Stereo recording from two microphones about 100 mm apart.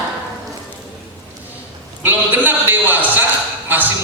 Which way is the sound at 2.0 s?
20° right (ahead or behind).